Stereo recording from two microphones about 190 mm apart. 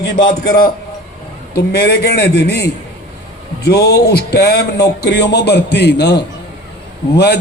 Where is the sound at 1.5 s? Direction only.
60° left (ahead or behind).